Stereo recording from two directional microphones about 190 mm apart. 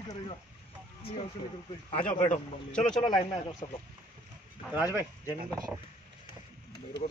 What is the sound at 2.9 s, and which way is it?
Speech, 20° left (ahead or behind).